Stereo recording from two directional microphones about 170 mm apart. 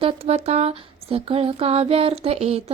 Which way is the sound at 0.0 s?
35° right (ahead or behind).